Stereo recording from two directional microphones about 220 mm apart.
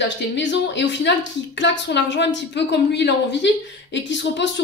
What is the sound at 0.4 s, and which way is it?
A woman's voice, 55° left (ahead or behind).